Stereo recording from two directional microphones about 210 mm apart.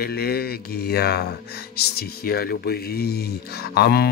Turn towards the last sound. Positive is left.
turn(degrees=50)  # may be behind; listen again after turning